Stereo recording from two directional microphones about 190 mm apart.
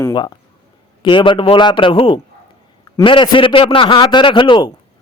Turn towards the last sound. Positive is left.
turn(degrees=25)  # may be behind; listen again after turning